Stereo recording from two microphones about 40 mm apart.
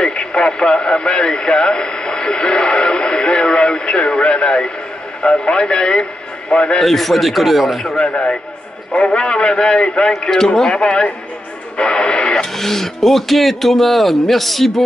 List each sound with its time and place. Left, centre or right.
0.0 s a man's voice: left
6.8 s speech: centre
8.1 s a man's voice: left
12.5 s speech: centre